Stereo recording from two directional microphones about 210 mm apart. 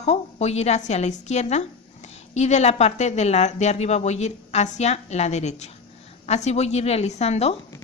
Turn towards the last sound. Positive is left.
turn(degrees=30)  # may be behind; listen again after turning